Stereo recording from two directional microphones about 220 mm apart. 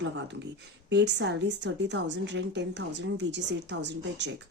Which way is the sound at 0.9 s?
50° right (ahead or behind).